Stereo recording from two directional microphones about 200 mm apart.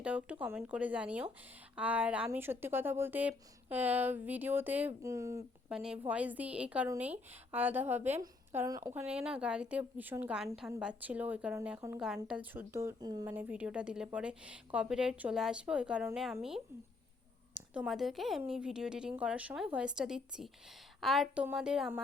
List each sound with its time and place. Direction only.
0.0 s speech: 5° right (ahead or behind)
5.7 s a woman's voice: 5° right (ahead or behind)
17.7 s a woman's voice: centre (ahead or behind)